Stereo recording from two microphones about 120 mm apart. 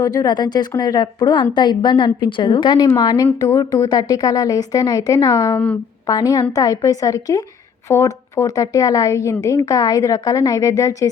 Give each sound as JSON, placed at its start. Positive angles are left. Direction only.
{"t": 0.0, "sound": "a woman's voice", "side_deg": 30}
{"t": 3.3, "sound": "a woman's voice", "side_deg": 30}